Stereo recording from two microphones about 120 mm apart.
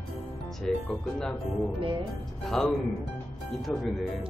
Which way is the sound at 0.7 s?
5° left (ahead or behind).